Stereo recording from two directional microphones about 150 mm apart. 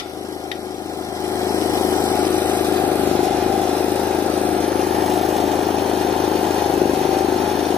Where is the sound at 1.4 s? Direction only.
20° left (ahead or behind).